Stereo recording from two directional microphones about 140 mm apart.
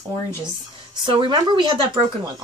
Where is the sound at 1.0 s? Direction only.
35° right (ahead or behind).